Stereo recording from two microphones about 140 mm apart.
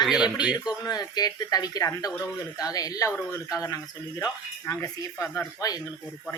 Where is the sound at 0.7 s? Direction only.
30° left (ahead or behind).